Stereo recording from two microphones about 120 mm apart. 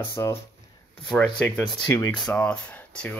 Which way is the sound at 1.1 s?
10° left (ahead or behind).